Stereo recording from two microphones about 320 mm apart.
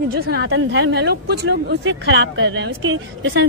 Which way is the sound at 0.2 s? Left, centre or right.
Right.